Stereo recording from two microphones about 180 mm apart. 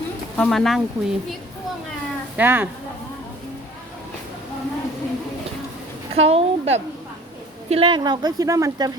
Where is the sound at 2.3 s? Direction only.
10° right (ahead or behind).